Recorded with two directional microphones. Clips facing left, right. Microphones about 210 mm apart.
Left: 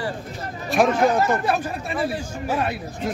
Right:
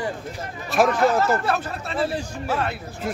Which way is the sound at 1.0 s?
20° left (ahead or behind).